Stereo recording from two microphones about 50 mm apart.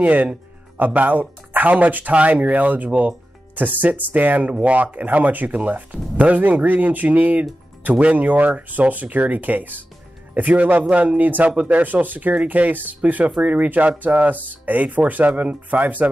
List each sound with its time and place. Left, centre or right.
0.0 s speech: right